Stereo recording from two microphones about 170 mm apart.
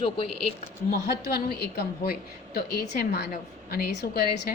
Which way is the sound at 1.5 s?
70° left (ahead or behind).